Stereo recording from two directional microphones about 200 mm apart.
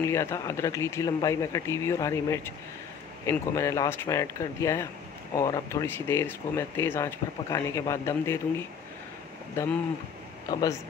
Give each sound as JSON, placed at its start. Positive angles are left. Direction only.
{"t": 0.0, "sound": "speech", "side_deg": 15}
{"t": 10.5, "sound": "a man's voice", "side_deg": 20}